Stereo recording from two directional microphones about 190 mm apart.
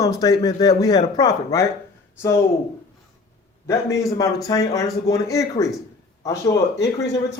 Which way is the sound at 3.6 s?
15° left (ahead or behind).